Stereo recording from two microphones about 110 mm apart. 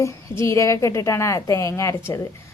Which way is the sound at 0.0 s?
25° left (ahead or behind).